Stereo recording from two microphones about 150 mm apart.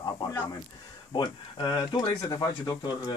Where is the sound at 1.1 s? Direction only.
30° left (ahead or behind).